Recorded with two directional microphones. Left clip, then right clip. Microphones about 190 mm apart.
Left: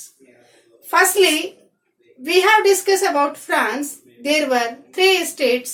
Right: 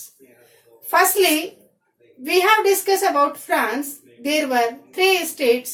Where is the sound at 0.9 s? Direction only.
25° left (ahead or behind).